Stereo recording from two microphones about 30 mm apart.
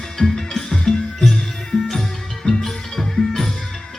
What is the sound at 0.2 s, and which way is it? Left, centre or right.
Music, centre.